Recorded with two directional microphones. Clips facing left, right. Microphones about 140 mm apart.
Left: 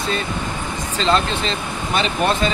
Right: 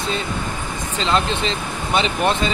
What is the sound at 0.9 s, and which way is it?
Speech, 20° right (ahead or behind).